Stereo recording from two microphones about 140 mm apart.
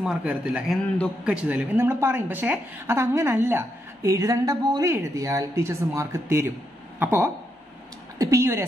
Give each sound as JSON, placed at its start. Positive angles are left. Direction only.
{"t": 0.0, "sound": "a man's voice", "side_deg": -10}